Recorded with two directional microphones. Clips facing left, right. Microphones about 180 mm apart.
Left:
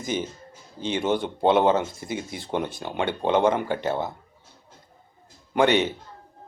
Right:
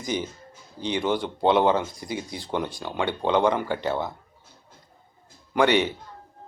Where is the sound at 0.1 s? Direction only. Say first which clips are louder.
Left 1 dB; 20° left (ahead or behind).